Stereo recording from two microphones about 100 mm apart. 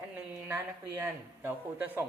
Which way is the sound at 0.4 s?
25° right (ahead or behind).